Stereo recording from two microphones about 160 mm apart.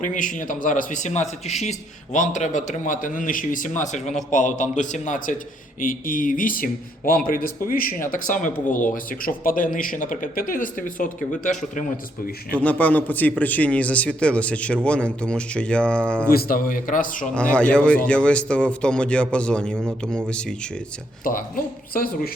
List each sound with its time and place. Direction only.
0.0 s a man's voice: 55° left (ahead or behind)
12.5 s a man's voice: 10° left (ahead or behind)
16.3 s speech: 70° left (ahead or behind)
17.3 s a man's voice: 5° left (ahead or behind)
21.2 s speech: 60° left (ahead or behind)